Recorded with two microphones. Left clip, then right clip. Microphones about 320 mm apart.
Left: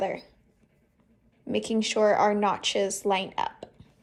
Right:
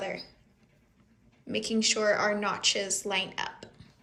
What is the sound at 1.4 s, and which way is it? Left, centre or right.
A woman's voice, centre.